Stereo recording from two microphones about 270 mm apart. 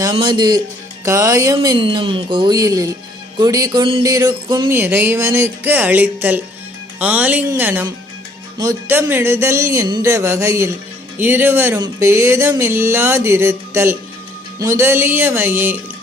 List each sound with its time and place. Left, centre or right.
0.0 s speech: centre